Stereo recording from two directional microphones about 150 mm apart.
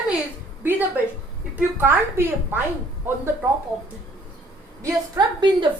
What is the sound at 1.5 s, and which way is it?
A woman's voice, 15° right (ahead or behind).